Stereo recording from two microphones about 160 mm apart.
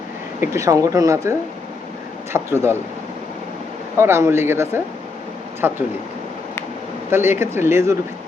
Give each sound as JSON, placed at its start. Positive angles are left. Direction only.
{"t": 0.3, "sound": "speech", "side_deg": -15}
{"t": 3.9, "sound": "speech", "side_deg": -15}
{"t": 7.1, "sound": "speech", "side_deg": -15}